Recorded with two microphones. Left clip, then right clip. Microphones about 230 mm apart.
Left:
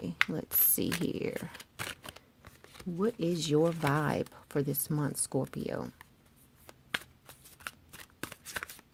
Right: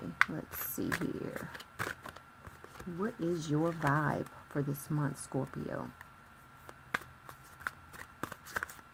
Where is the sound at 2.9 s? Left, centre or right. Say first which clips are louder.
Left 4 dB; left.